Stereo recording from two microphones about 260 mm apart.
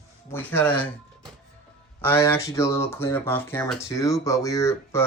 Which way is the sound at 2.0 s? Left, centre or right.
Centre.